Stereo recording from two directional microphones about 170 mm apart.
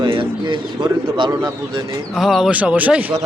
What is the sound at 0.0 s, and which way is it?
Bird, 30° right (ahead or behind).